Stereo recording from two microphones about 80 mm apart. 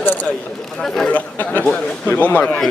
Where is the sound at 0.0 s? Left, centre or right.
Left.